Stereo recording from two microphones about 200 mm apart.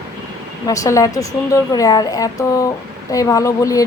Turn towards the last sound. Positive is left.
turn(degrees=15)  # may be behind; listen again after turning